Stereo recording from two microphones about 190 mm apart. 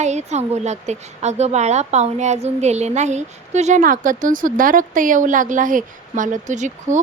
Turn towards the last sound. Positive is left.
turn(degrees=-40)  # may be behind; listen again after turning